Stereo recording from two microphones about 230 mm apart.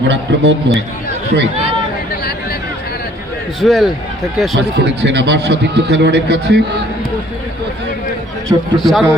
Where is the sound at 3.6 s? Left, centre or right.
Centre.